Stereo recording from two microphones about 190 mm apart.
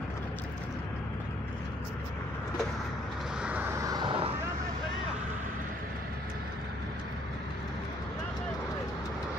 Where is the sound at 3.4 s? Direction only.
10° right (ahead or behind); by 4.3 s 25° right (ahead or behind).